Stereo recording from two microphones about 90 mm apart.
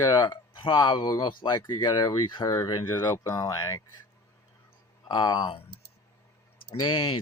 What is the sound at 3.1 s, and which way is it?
Speech, 35° left (ahead or behind).